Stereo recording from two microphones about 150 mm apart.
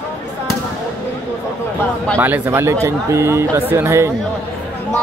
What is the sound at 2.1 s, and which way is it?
Speech, 15° right (ahead or behind).